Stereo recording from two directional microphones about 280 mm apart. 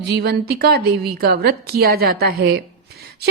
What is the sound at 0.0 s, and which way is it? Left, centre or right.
A woman's voice, right.